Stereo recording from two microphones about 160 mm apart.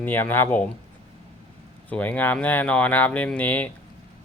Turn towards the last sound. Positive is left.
turn(degrees=10)  # may be behind; listen again after turning